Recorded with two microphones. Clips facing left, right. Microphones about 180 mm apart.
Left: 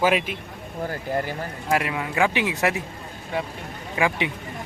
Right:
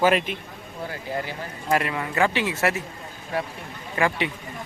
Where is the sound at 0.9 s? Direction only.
45° left (ahead or behind).